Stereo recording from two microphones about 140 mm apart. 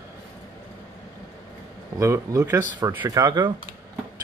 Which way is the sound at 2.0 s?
20° right (ahead or behind).